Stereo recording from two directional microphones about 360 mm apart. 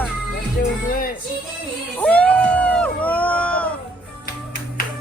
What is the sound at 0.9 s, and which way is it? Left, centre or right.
Music, left.